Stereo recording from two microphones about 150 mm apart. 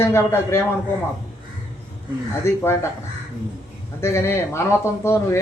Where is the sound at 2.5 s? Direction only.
15° left (ahead or behind).